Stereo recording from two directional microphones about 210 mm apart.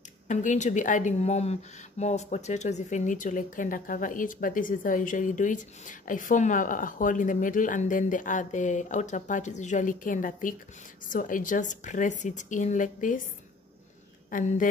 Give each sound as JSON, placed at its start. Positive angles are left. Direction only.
{"t": 0.3, "sound": "speech", "side_deg": 35}
{"t": 14.3, "sound": "speech", "side_deg": 40}